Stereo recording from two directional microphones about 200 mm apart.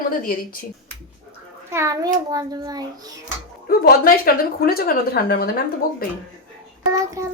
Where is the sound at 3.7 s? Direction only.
45° left (ahead or behind).